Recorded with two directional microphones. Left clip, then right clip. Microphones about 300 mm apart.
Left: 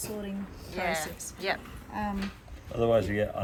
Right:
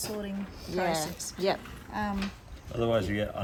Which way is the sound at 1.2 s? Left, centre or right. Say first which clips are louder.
Right 3 dB; centre.